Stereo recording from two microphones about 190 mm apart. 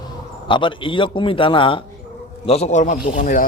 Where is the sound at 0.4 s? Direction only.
25° left (ahead or behind).